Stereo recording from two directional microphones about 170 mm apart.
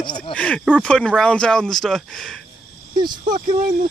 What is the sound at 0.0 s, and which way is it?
Speech, 25° left (ahead or behind).